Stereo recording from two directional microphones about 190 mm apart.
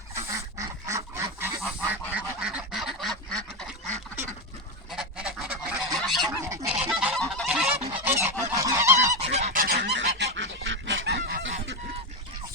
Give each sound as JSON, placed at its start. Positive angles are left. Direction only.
{"t": 0.3, "sound": "duck", "side_deg": -15}
{"t": 4.9, "sound": "goose", "side_deg": -5}
{"t": 6.3, "sound": "goose", "side_deg": -15}
{"t": 6.9, "sound": "goose", "side_deg": 0}
{"t": 7.9, "sound": "goose", "side_deg": -15}
{"t": 9.3, "sound": "goose", "side_deg": -40}